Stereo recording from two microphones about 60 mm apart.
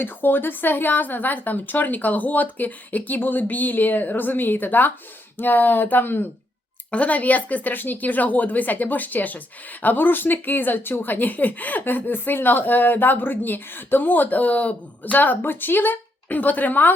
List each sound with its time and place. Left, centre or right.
0.0 s speech: left
6.9 s speech: left